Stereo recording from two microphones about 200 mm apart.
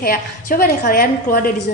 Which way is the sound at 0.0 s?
45° left (ahead or behind).